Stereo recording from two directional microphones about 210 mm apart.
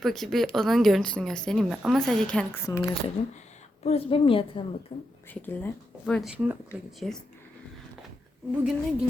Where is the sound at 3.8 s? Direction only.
30° left (ahead or behind).